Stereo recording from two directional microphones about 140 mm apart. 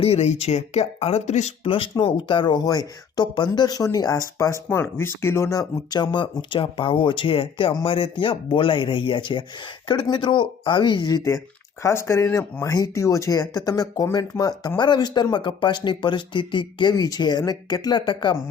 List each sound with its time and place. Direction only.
0.0 s speech: 50° left (ahead or behind)
1.7 s speech: 40° left (ahead or behind)